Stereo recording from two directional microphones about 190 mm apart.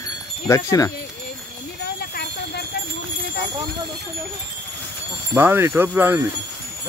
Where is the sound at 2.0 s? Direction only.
55° left (ahead or behind).